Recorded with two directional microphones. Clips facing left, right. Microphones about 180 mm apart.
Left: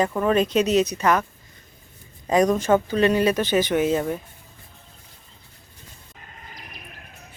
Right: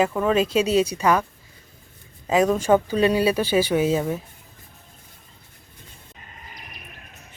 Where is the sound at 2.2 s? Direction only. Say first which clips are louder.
Even; 5° right (ahead or behind).